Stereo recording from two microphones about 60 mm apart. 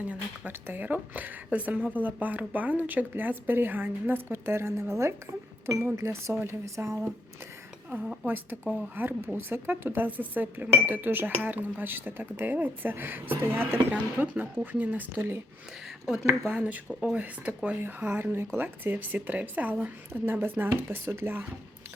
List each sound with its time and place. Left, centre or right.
0.1 s speech: right
8.0 s a woman's voice: centre
8.3 s speech: right
16.5 s speech: right
17.7 s speech: right
20.2 s speech: right